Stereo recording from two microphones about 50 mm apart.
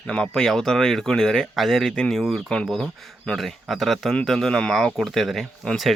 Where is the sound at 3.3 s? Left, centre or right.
Centre.